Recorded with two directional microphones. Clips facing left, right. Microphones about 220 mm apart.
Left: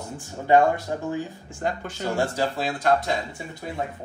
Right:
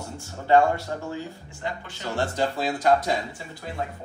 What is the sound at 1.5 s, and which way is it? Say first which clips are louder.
Speech: left 6 dB; 45° left (ahead or behind).